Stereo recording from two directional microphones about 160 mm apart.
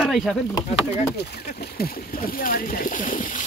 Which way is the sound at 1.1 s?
80° left.